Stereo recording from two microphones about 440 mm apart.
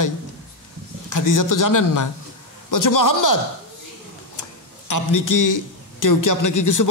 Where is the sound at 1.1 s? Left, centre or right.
Left.